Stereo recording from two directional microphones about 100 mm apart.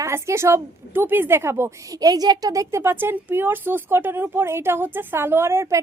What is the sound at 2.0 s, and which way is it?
A woman's voice, 40° right (ahead or behind).